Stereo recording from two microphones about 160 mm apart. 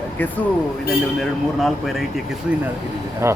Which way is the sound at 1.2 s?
Centre (ahead or behind).